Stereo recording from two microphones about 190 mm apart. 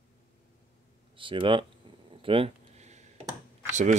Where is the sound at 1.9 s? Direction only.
25° right (ahead or behind).